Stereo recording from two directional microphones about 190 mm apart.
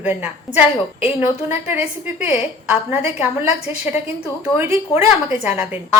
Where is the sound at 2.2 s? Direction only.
35° left (ahead or behind).